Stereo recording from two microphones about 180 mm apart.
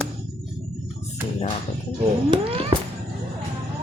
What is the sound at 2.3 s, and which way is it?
Speech, 30° right (ahead or behind).